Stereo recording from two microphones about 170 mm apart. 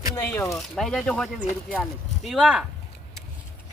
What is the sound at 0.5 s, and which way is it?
Speech, 5° left (ahead or behind).